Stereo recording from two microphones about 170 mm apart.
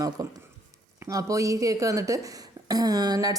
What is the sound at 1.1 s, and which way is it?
A woman's voice, 20° right (ahead or behind).